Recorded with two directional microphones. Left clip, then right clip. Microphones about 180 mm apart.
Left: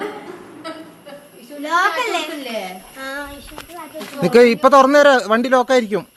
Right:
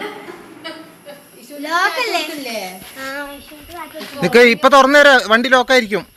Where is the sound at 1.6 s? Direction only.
35° right (ahead or behind).